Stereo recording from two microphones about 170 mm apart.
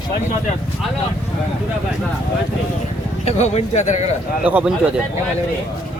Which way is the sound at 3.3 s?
40° left (ahead or behind).